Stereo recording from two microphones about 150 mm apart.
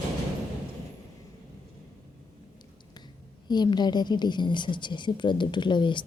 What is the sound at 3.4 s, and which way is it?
A woman's voice, 30° left (ahead or behind).